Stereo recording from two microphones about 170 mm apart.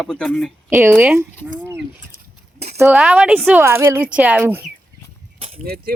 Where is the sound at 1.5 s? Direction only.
15° right (ahead or behind).